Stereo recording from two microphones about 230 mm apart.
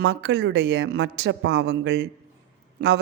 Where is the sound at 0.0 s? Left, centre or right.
Right.